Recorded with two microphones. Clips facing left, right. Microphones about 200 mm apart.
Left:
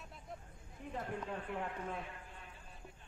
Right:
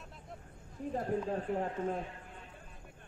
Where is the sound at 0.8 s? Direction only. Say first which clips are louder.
Right 8 dB; 35° right (ahead or behind).